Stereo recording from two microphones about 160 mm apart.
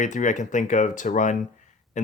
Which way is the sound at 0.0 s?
50° left (ahead or behind).